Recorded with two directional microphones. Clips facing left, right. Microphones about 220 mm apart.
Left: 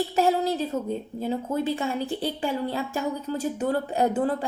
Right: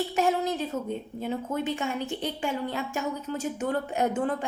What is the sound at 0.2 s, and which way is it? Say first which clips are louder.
A woman's voice: left 3 dB; 35° left (ahead or behind).